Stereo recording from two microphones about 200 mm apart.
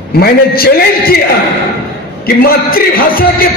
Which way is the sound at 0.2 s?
50° left (ahead or behind).